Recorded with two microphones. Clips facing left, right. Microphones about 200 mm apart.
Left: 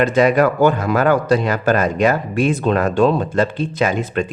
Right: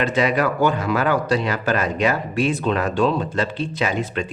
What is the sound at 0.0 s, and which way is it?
Speech, 45° left (ahead or behind).